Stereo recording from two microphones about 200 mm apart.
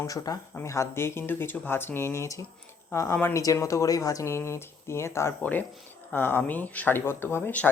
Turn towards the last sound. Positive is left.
turn(degrees=10)  # may be behind; listen again after turning